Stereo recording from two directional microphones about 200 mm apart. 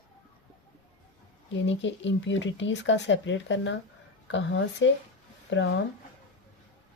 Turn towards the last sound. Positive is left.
turn(degrees=65)  # may be behind; listen again after turning